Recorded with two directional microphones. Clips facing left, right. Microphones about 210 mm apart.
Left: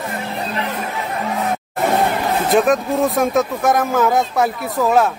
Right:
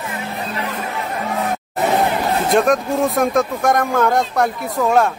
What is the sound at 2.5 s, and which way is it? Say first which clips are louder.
Speech: left 1 dB; centre (ahead or behind).